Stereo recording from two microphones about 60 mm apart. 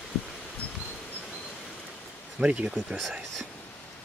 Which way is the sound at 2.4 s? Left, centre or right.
Centre.